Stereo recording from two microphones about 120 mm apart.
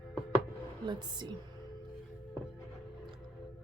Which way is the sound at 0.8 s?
40° right (ahead or behind).